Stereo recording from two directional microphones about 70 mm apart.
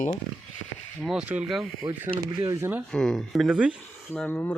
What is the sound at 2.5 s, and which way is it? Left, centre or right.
Speech, right.